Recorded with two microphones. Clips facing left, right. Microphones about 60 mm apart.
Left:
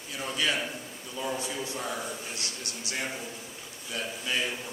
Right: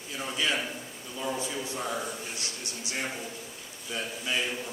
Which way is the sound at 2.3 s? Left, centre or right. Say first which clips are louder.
Even; right.